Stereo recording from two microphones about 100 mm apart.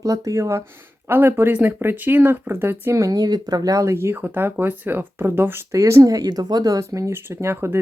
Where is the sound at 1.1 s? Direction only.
20° right (ahead or behind).